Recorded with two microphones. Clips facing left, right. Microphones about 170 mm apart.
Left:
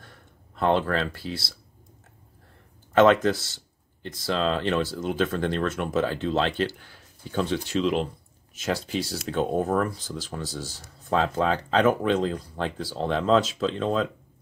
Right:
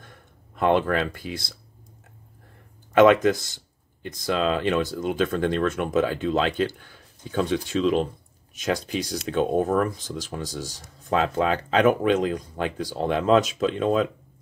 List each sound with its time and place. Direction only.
0.6 s speech: 15° right (ahead or behind)
2.9 s speech: 15° right (ahead or behind)
8.5 s speech: 20° right (ahead or behind)